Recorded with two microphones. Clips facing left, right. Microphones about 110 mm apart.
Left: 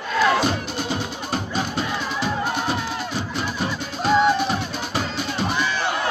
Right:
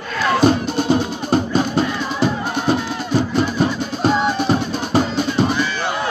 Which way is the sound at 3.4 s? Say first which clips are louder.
Right 8 dB; 35° right (ahead or behind).